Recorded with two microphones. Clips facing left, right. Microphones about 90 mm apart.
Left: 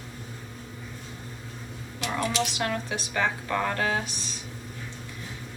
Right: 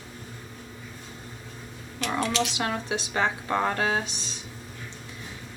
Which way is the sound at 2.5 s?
20° right (ahead or behind).